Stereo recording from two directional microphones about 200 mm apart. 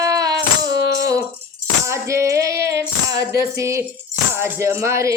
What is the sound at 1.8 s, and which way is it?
Music, 15° right (ahead or behind).